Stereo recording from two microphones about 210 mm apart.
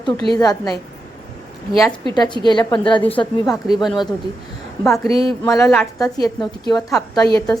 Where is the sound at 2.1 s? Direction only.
20° left (ahead or behind).